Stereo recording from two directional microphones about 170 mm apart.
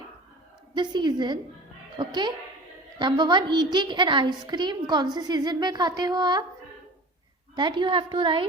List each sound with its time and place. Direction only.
0.8 s a woman's voice: 25° right (ahead or behind)
7.5 s a woman's voice: 30° right (ahead or behind)